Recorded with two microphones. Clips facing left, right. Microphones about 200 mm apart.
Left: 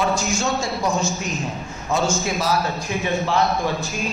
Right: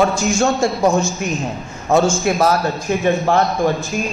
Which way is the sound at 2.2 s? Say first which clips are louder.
Right 6 dB; 55° right (ahead or behind).